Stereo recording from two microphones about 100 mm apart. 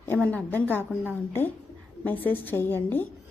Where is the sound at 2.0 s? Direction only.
20° left (ahead or behind).